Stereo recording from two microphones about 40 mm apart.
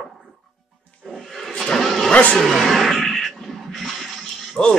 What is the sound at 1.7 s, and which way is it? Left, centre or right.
Vehicle, centre.